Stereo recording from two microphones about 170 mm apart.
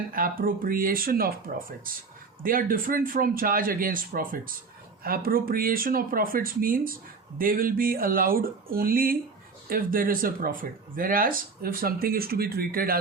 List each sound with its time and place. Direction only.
0.1 s speech: 55° right (ahead or behind)